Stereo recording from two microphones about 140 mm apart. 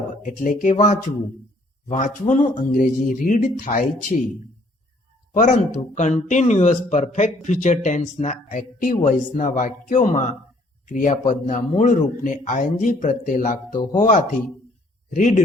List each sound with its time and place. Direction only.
0.2 s speech: 65° left (ahead or behind)
5.3 s speech: 60° left (ahead or behind)